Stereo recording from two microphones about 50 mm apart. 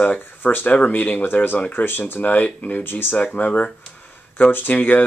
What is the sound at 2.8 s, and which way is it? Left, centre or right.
Speech, left.